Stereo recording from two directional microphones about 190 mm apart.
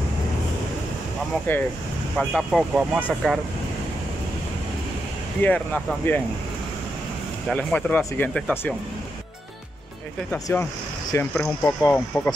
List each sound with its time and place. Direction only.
1.5 s speech: 10° left (ahead or behind)
2.1 s speech: centre (ahead or behind)
5.4 s speech: 10° left (ahead or behind)
7.4 s speech: 5° left (ahead or behind)
10.3 s speech: 15° left (ahead or behind)